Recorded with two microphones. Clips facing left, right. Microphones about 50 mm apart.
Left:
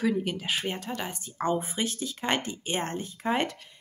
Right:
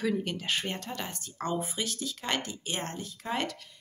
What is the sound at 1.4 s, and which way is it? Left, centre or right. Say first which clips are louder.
A woman's voice: left 4 dB; left.